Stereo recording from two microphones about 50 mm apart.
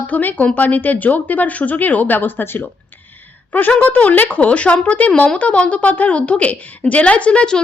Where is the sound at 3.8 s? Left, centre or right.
Left.